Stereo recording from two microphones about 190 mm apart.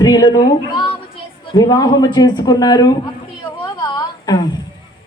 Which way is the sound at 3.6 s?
20° left (ahead or behind).